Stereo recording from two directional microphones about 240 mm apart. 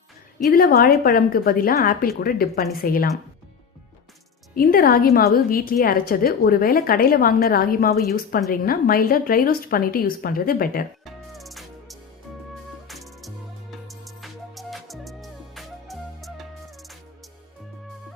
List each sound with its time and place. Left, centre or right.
0.5 s a woman's voice: left
4.5 s a woman's voice: left
11.0 s music: centre